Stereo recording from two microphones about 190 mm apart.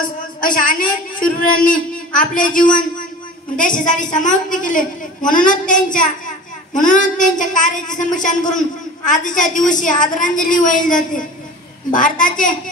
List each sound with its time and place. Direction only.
0.4 s a woman's voice: 45° left (ahead or behind)